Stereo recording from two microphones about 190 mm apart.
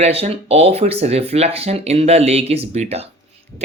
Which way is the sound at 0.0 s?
30° right (ahead or behind).